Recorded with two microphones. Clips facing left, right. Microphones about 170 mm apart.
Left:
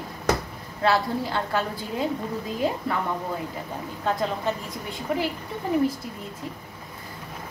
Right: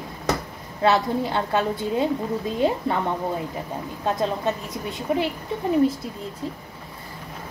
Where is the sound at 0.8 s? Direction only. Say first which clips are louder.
Right 3 dB; 20° right (ahead or behind).